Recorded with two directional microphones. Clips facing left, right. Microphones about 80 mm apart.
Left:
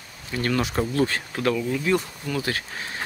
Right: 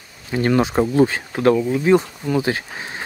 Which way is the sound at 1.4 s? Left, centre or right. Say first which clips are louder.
Right 8 dB; right.